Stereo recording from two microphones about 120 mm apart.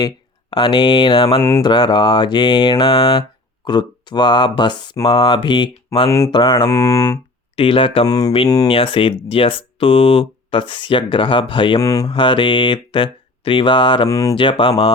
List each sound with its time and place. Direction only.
0.5 s speech: 45° left (ahead or behind)
1.4 s speech: 20° left (ahead or behind)
1.6 s mantra: 40° left (ahead or behind)
6.1 s speech: 20° left (ahead or behind)
6.3 s mantra: 40° left (ahead or behind)
6.7 s speech: 20° left (ahead or behind)
7.5 s speech: 50° left (ahead or behind)
8.0 s mantra: 30° left (ahead or behind)
8.6 s speech: 50° left (ahead or behind)
11.8 s speech: 30° left (ahead or behind)
12.1 s speech: 45° left (ahead or behind)
14.1 s speech: 25° left (ahead or behind)
14.3 s speech: 45° left (ahead or behind)